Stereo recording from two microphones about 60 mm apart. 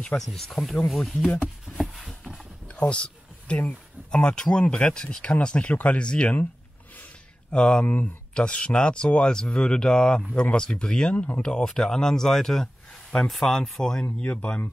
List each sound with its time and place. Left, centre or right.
0.2 s speech: centre
1.2 s speech: centre
1.8 s a sound: centre
2.7 s a sound: centre
4.1 s speech: centre
7.5 s speech: centre
7.8 s speech: left; by 14.0 s centre
14.2 s speech: centre